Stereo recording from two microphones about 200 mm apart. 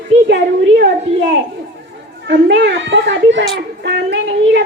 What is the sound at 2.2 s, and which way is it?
A woman's voice, 55° right (ahead or behind).